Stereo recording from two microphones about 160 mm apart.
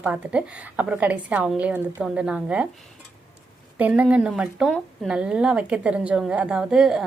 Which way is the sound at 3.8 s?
10° right (ahead or behind).